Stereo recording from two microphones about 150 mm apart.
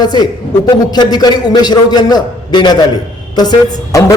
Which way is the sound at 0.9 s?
30° left (ahead or behind).